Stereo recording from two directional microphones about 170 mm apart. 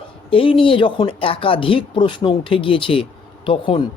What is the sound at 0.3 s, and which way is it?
A man's voice, 30° left (ahead or behind).